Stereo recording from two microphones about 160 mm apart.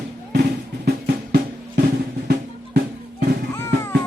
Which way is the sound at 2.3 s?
90° right.